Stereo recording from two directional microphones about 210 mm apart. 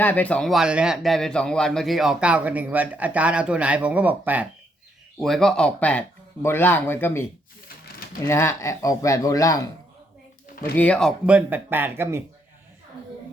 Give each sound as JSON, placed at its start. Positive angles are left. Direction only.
{"t": 0.0, "sound": "a man's voice", "side_deg": 10}
{"t": 8.3, "sound": "speech", "side_deg": 15}
{"t": 10.8, "sound": "a man's voice", "side_deg": 5}
{"t": 11.3, "sound": "speech", "side_deg": -10}